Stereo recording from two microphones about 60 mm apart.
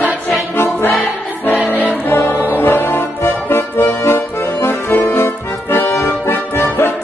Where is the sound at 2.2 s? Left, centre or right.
Left.